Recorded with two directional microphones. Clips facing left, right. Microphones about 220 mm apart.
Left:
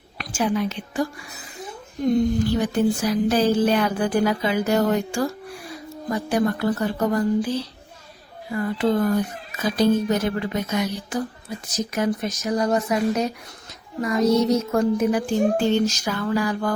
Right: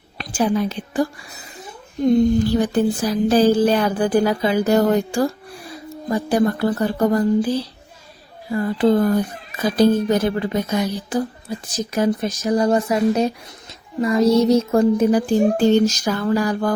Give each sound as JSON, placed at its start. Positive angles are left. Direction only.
{"t": 0.3, "sound": "speech", "side_deg": -35}
{"t": 2.6, "sound": "speech", "side_deg": -35}
{"t": 8.5, "sound": "a child's voice", "side_deg": -35}